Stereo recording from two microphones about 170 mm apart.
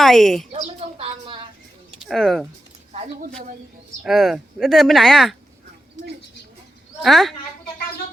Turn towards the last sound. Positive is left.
turn(degrees=0)  # may be behind; listen again after turning